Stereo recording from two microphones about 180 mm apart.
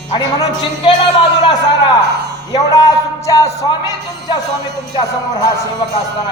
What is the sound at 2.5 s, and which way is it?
Speech, 20° left (ahead or behind).